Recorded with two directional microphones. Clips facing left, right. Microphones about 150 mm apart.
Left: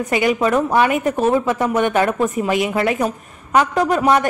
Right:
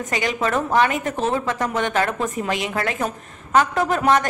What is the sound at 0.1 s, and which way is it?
A woman's voice, 10° left (ahead or behind).